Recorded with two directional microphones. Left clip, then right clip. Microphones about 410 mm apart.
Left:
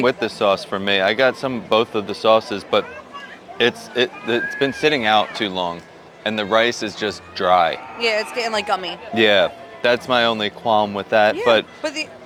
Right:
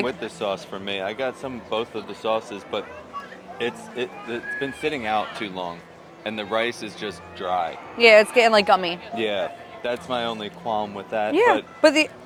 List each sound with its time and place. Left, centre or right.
0.0 s speech: left
3.6 s speech: left
7.9 s speech: right
9.1 s speech: left